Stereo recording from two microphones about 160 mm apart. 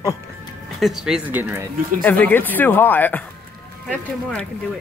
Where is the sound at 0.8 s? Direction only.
5° right (ahead or behind).